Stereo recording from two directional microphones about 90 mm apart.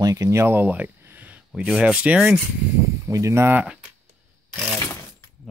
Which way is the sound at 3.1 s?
35° right (ahead or behind).